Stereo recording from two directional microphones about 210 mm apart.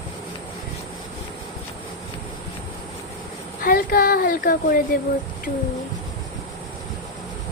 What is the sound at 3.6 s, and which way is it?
Speech, 45° left (ahead or behind).